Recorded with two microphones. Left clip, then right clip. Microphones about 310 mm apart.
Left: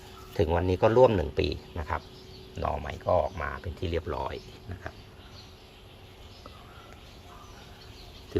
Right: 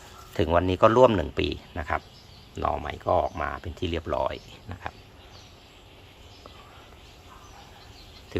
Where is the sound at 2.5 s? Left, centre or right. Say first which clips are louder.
Right 4 dB; centre.